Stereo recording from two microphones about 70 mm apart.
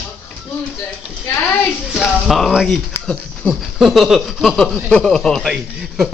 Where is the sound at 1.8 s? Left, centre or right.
Centre.